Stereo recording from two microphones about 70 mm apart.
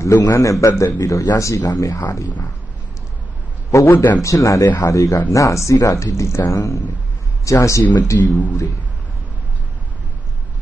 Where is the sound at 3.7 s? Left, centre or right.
Left.